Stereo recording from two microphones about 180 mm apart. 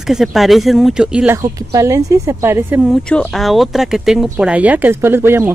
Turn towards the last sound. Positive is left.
turn(degrees=-10)  # may be behind; listen again after turning